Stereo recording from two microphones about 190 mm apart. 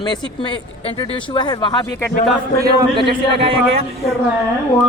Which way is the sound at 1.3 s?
25° left (ahead or behind).